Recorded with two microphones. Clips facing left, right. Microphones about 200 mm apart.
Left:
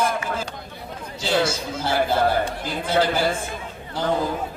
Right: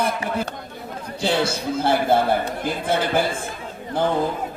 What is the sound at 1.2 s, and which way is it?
A man's voice, 60° right (ahead or behind).